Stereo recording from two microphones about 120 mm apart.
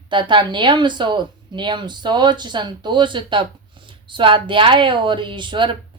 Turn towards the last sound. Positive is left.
turn(degrees=-40)  # may be behind; listen again after turning